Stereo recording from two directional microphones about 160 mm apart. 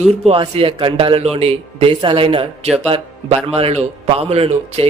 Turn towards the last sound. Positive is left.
turn(degrees=-40)  # may be behind; listen again after turning